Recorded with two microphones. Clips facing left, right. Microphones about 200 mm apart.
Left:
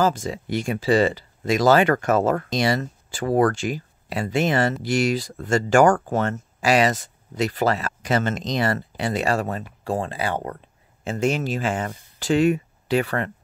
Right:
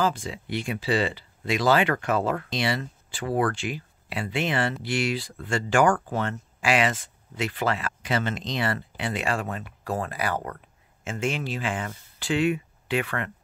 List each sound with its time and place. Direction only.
0.0 s speech: 45° left (ahead or behind)